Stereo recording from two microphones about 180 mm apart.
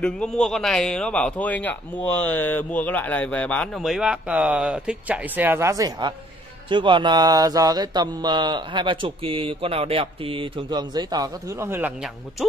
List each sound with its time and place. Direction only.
0.0 s a man's voice: 5° left (ahead or behind); by 11.9 s 15° right (ahead or behind)